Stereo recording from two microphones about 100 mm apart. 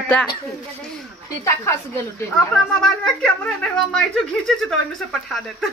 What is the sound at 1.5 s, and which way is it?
Speech, 25° left (ahead or behind).